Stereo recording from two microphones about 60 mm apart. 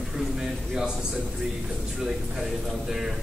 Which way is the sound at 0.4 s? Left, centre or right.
Centre.